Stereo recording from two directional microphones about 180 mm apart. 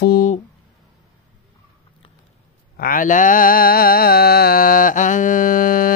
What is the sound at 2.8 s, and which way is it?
Mantra, 50° left (ahead or behind).